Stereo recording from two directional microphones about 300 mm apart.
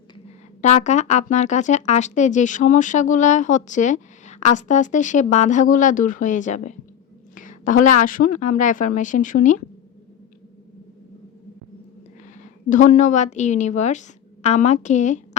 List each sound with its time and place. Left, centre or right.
0.6 s a woman's voice: left
12.7 s speech: left